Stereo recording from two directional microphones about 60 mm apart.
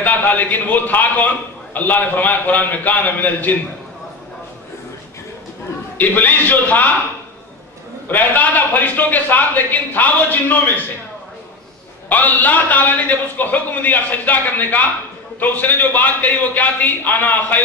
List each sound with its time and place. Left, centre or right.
0.0 s a man's voice: left
5.9 s a man's voice: left
8.1 s a man's voice: left
12.1 s a man's voice: left